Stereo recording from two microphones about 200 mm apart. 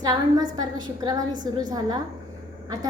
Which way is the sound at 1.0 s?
20° right (ahead or behind).